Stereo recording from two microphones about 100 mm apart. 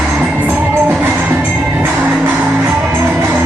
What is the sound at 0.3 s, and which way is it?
Music, 15° right (ahead or behind).